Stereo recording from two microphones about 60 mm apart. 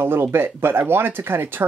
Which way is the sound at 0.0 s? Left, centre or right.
Right.